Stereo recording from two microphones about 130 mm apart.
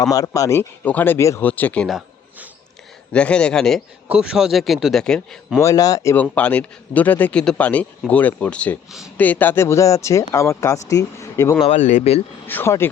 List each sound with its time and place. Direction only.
0.1 s speech: 25° left (ahead or behind)
0.9 s a man's voice: 15° left (ahead or behind)
3.1 s a man's voice: 10° left (ahead or behind)
4.1 s a man's voice: 5° right (ahead or behind)
5.5 s speech: 25° left (ahead or behind)
6.3 s a man's voice: 10° left (ahead or behind)
11.7 s speech: 70° left (ahead or behind)
12.5 s a man's voice: 20° left (ahead or behind)